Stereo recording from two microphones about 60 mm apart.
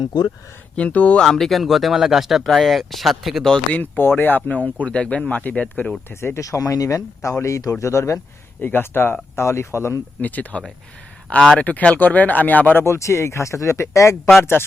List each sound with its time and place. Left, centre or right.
0.8 s speech: left
1.3 s speech: centre
3.7 s speech: left
6.1 s speech: left
6.4 s speech: left
8.6 s speech: left
10.2 s speech: left
11.3 s speech: centre
11.6 s speech: left
12.8 s speech: left
14.5 s speech: left